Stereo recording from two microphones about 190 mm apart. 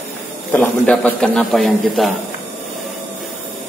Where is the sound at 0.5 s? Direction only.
10° left (ahead or behind).